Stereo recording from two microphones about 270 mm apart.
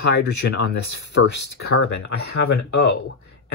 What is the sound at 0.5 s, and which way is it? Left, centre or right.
Speech, left.